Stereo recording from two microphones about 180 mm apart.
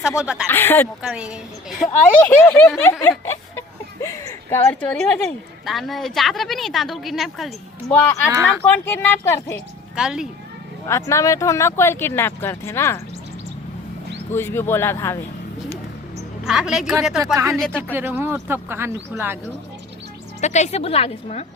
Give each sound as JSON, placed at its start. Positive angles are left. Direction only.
{"t": 0.2, "sound": "speech", "side_deg": -5}
{"t": 0.4, "sound": "speech", "side_deg": 10}
{"t": 1.0, "sound": "speech", "side_deg": -5}
{"t": 1.9, "sound": "speech", "side_deg": 10}
{"t": 3.1, "sound": "snicker", "side_deg": 15}
{"t": 4.0, "sound": "speech", "side_deg": 15}
{"t": 8.3, "sound": "speech", "side_deg": -15}
{"t": 8.6, "sound": "speech", "side_deg": 10}
{"t": 9.9, "sound": "speech", "side_deg": -5}
{"t": 10.8, "sound": "speech", "side_deg": 15}
{"t": 14.3, "sound": "speech", "side_deg": 15}
{"t": 16.5, "sound": "speech", "side_deg": 0}
{"t": 17.9, "sound": "speech", "side_deg": -10}
{"t": 20.4, "sound": "a woman's voice", "side_deg": 40}